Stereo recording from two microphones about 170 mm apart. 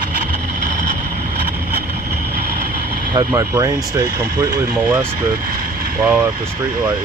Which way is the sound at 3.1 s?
20° right (ahead or behind).